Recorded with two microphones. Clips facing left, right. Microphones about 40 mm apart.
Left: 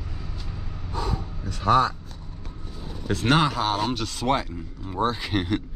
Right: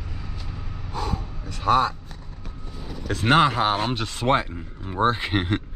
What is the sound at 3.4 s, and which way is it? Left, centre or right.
Speech, right.